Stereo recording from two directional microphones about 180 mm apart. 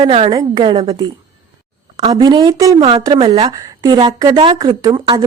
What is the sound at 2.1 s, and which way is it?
A woman's voice, 25° right (ahead or behind).